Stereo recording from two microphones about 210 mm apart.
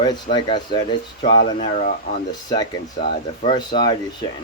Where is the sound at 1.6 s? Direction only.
35° left (ahead or behind).